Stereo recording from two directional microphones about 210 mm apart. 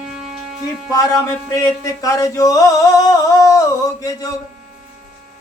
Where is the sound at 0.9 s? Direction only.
15° left (ahead or behind).